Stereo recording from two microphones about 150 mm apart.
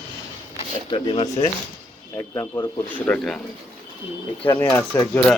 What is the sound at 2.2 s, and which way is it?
Speech, 20° left (ahead or behind).